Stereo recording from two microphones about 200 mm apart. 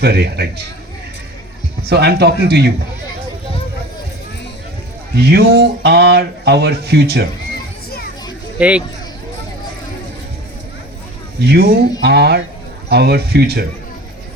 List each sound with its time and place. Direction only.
0.0 s speech: 55° right (ahead or behind)
1.9 s speech: 55° right (ahead or behind)
5.1 s speech: 55° right (ahead or behind)
7.9 s music: 50° left (ahead or behind)
8.5 s speech: 5° right (ahead or behind)
11.3 s speech: 55° right (ahead or behind)